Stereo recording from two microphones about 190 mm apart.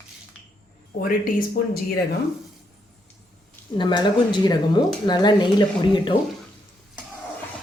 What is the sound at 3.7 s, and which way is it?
Speech, 25° left (ahead or behind).